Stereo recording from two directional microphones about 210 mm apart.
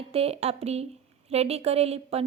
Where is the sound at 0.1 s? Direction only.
30° right (ahead or behind).